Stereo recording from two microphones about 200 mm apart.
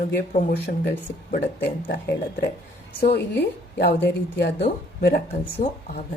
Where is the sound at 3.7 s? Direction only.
55° left (ahead or behind).